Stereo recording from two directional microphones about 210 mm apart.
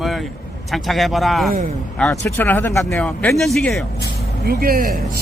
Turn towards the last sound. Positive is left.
turn(degrees=-45)  # may be behind; listen again after turning